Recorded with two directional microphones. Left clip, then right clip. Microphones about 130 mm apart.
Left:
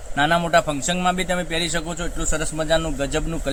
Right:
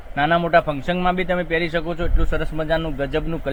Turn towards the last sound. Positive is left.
turn(degrees=-30)  # may be behind; listen again after turning